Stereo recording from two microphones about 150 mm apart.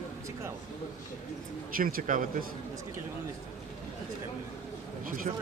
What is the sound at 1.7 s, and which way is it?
Speech, 75° right (ahead or behind).